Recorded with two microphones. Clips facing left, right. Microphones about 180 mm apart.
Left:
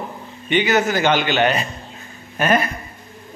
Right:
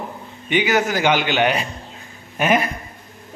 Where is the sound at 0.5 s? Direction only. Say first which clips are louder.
Left 1 dB; 10° right (ahead or behind).